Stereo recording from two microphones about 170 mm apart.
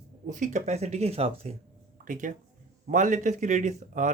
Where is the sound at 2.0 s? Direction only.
50° right (ahead or behind).